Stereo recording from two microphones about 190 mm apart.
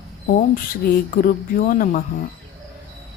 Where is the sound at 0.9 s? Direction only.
50° left (ahead or behind).